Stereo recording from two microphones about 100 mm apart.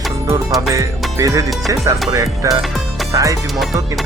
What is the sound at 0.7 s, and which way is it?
Speech, 35° right (ahead or behind).